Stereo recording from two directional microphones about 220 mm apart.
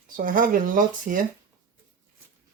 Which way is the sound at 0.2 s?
40° right (ahead or behind).